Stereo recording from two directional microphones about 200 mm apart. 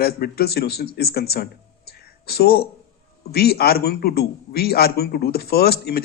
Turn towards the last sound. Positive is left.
turn(degrees=50)  # may be behind; listen again after turning